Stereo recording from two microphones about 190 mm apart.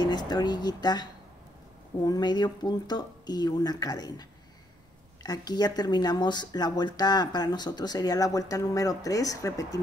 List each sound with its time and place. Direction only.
0.0 s speech: 20° left (ahead or behind)
2.0 s speech: 20° left (ahead or behind)